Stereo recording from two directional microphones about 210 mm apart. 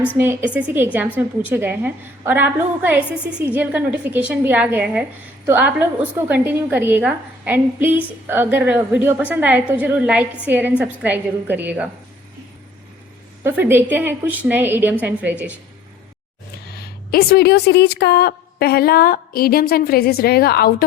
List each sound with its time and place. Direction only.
0.2 s a woman's voice: 10° right (ahead or behind)
13.4 s a woman's voice: 10° right (ahead or behind)
16.6 s a woman's voice: 50° left (ahead or behind)